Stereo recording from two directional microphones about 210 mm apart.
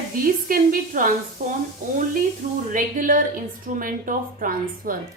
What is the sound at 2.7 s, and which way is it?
A woman's voice, 40° right (ahead or behind).